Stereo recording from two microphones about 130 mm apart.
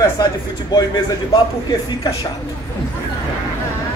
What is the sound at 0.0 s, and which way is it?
A man's voice, 30° left (ahead or behind).